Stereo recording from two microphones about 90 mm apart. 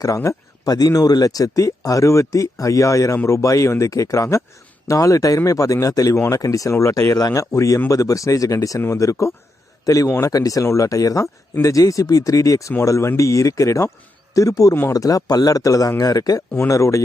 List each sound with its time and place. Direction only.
0.0 s speech: 35° left (ahead or behind)